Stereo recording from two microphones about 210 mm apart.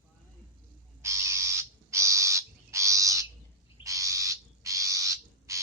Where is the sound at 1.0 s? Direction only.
15° right (ahead or behind).